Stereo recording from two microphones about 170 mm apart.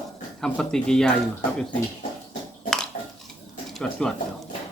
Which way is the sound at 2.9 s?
40° left (ahead or behind).